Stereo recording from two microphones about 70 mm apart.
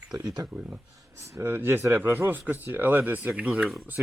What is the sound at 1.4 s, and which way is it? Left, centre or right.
A man's voice, right.